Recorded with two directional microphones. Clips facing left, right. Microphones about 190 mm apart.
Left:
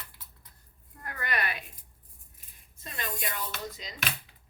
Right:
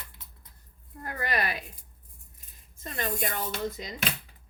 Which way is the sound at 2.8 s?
45° right (ahead or behind).